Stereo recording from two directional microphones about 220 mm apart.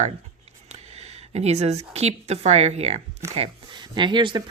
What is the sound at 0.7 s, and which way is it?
Speech, 30° right (ahead or behind).